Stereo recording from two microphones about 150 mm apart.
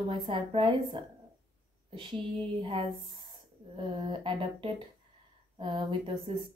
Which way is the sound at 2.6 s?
35° right (ahead or behind).